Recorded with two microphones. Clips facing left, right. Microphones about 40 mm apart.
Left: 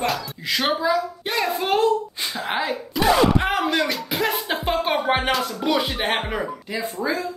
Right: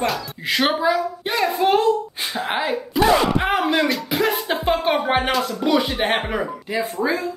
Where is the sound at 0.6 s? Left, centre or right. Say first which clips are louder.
Right 2 dB; right.